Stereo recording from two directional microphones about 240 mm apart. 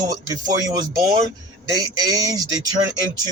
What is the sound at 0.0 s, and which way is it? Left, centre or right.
A man's voice, centre.